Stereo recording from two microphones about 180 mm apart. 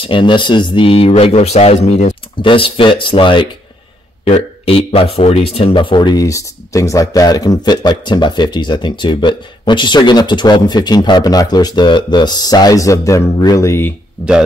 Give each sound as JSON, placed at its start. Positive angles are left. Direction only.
{"t": 0.0, "sound": "speech", "side_deg": 30}
{"t": 2.4, "sound": "speech", "side_deg": 30}